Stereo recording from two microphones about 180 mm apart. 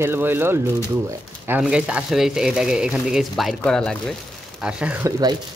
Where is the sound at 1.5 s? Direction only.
5° right (ahead or behind).